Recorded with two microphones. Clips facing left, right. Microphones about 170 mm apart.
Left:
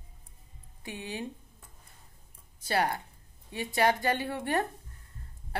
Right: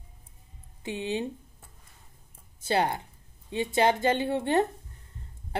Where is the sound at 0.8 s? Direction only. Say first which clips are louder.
Right 7 dB; 25° right (ahead or behind).